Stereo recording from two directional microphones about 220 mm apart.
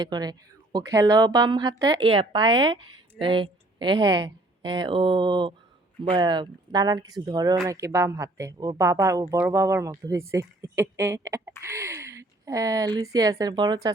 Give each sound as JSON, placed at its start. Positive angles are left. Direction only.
{"t": 0.0, "sound": "a woman's voice", "side_deg": -20}